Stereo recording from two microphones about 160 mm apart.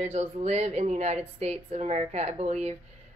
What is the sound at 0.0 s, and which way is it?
Speech, 40° right (ahead or behind).